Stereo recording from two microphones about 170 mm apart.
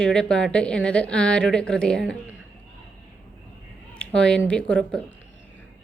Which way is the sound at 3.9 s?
5° left (ahead or behind).